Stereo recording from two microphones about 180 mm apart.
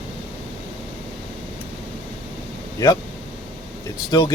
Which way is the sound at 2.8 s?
15° left (ahead or behind).